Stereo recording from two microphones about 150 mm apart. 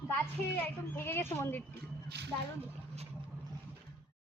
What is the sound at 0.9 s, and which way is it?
Speech, 15° left (ahead or behind).